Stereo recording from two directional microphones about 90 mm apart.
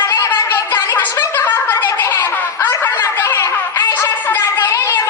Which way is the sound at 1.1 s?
25° left (ahead or behind).